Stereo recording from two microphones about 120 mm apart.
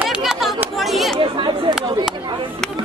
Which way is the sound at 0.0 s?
5° right (ahead or behind).